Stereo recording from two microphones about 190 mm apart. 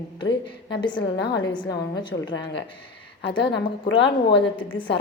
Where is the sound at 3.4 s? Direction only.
65° left (ahead or behind).